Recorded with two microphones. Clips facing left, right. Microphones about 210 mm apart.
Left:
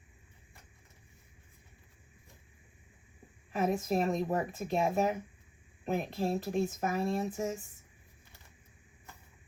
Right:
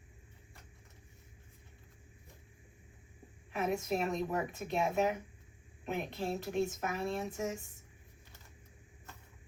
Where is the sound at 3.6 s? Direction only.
35° left (ahead or behind).